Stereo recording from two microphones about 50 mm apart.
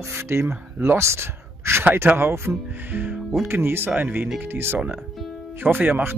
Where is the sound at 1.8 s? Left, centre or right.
Right.